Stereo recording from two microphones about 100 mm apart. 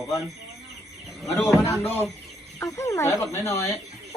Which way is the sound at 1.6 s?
20° left (ahead or behind).